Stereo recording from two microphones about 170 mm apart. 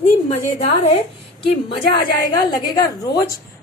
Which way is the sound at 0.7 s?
35° left (ahead or behind).